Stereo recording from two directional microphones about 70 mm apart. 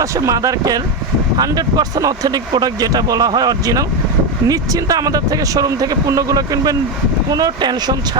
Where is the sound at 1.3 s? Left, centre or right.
Right.